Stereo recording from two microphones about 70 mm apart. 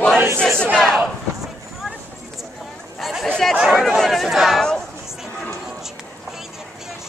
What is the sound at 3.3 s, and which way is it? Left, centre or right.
Speech, centre.